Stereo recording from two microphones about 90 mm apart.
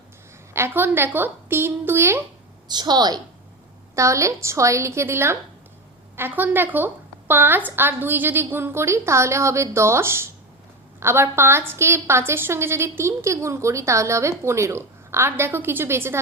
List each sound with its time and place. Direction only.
0.5 s a woman's voice: 25° right (ahead or behind)
2.6 s a woman's voice: 55° right (ahead or behind)
3.9 s a woman's voice: 35° right (ahead or behind)